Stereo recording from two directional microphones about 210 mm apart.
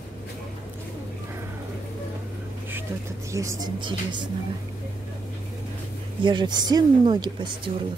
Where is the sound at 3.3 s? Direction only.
15° right (ahead or behind).